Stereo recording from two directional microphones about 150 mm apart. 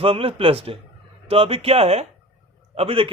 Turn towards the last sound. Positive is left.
turn(degrees=-40)  # may be behind; listen again after turning